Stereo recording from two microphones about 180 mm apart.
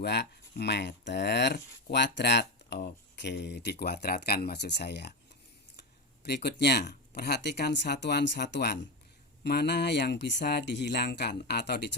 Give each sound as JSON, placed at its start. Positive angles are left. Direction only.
{"t": 0.0, "sound": "speech", "side_deg": 70}
{"t": 6.2, "sound": "speech", "side_deg": 65}